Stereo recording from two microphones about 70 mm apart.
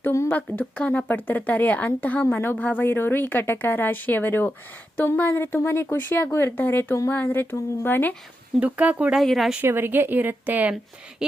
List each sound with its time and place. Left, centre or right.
0.1 s speech: left
0.6 s speech: centre
2.3 s speech: left
8.6 s speech: right
9.1 s speech: centre
9.6 s speech: right
11.2 s a sound: centre